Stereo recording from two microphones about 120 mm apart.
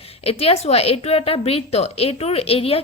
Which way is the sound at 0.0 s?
55° left (ahead or behind).